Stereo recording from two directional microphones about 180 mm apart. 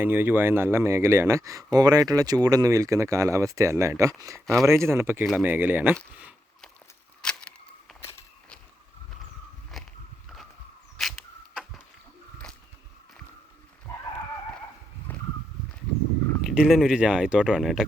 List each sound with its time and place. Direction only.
0.0 s speech: 10° right (ahead or behind)
7.2 s a sound: 5° left (ahead or behind)
9.7 s biting: centre (ahead or behind)
13.9 s dog: 15° left (ahead or behind)
15.1 s horse: 10° left (ahead or behind)
16.4 s speech: centre (ahead or behind)